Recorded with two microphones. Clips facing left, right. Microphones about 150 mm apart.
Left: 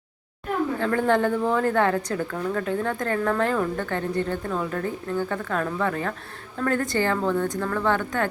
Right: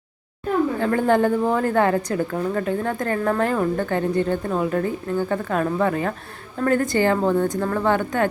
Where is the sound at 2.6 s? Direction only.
5° right (ahead or behind).